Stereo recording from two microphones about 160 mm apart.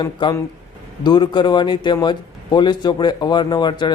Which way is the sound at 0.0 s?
30° left (ahead or behind).